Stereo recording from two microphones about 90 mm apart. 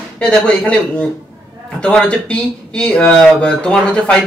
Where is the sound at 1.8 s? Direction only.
10° left (ahead or behind).